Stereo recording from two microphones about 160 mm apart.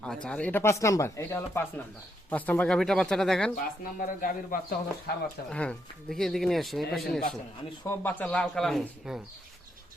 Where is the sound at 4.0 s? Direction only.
60° left (ahead or behind).